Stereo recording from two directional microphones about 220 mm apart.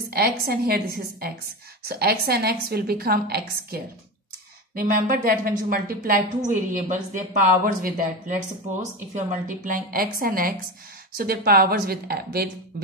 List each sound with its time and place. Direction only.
0.1 s a woman's voice: 45° right (ahead or behind)